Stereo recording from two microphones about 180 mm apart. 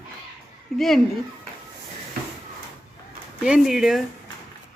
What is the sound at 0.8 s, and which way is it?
Speech, centre (ahead or behind).